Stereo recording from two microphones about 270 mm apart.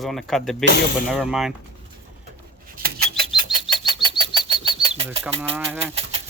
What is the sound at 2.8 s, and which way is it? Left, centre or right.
Rodents, right.